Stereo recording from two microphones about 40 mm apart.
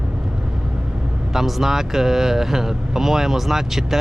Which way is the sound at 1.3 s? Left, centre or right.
Centre.